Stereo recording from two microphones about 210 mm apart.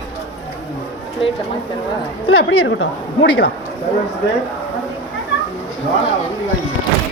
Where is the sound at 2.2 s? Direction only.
75° left (ahead or behind); by 3.5 s 55° left (ahead or behind).